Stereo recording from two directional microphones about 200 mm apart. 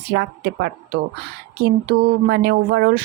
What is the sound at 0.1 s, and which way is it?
A woman's voice, 55° right (ahead or behind).